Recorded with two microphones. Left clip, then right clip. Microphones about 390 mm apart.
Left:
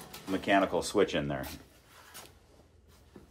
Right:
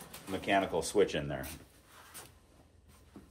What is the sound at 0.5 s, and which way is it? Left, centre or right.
Speech, left.